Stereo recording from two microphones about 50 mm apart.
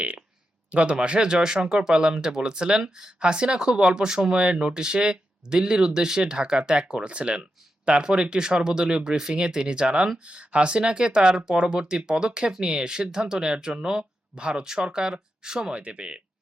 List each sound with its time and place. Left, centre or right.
0.7 s speech: right